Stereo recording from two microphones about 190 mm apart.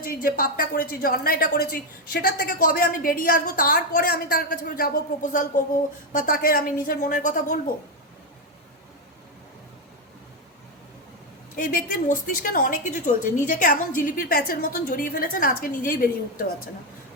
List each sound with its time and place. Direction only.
0.0 s a woman's voice: 50° left (ahead or behind)
11.5 s a woman's voice: 50° left (ahead or behind)